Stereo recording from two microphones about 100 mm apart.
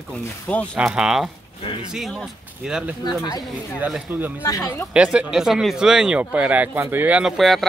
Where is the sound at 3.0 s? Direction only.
40° left (ahead or behind).